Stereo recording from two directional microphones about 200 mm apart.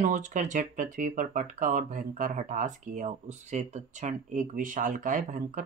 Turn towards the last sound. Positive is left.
turn(degrees=-40)  # may be behind; listen again after turning